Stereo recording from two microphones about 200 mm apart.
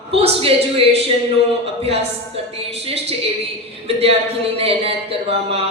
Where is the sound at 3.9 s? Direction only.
30° right (ahead or behind).